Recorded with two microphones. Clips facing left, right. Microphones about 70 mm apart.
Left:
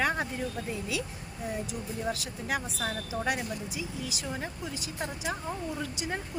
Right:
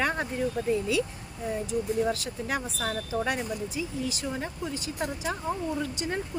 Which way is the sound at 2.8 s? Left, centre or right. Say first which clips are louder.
Right 3 dB; centre.